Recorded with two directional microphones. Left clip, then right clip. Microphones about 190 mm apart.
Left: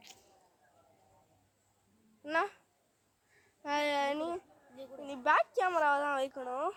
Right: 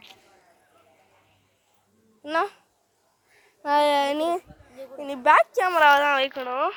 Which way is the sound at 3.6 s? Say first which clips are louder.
Right 12 dB; 25° right (ahead or behind).